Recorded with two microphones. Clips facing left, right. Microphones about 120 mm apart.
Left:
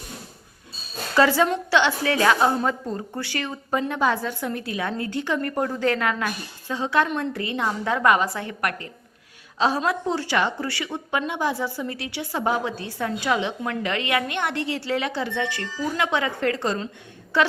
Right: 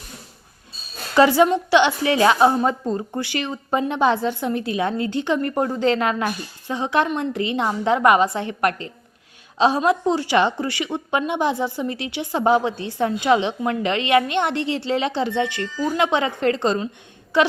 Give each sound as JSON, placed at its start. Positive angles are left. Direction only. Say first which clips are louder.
{"t": 1.1, "sound": "a woman's voice", "louder": "right 4 dB", "side_deg": -15}